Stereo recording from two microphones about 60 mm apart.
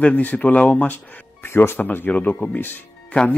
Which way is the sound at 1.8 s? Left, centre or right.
Left.